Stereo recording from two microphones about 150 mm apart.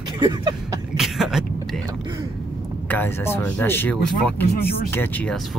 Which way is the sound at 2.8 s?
10° left (ahead or behind).